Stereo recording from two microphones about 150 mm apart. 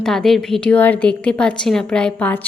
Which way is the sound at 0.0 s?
5° left (ahead or behind).